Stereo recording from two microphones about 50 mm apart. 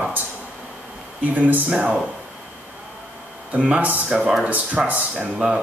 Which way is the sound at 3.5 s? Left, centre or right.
Right.